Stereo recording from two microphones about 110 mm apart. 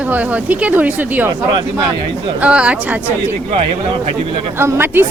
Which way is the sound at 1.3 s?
50° right (ahead or behind).